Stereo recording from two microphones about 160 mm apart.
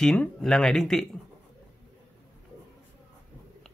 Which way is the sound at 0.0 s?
5° left (ahead or behind).